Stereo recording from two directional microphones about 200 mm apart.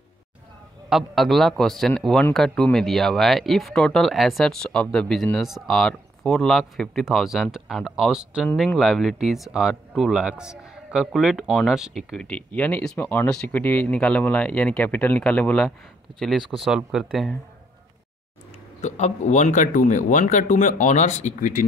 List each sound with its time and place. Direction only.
0.8 s speech: centre (ahead or behind)
18.8 s speech: 35° left (ahead or behind)